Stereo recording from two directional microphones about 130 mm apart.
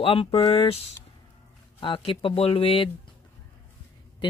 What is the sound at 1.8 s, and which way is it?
Speech, 40° left (ahead or behind).